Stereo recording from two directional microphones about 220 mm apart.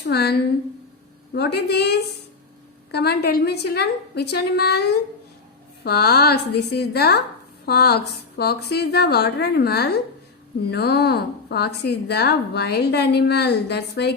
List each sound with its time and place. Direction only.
0.0 s a woman's voice: 45° left (ahead or behind)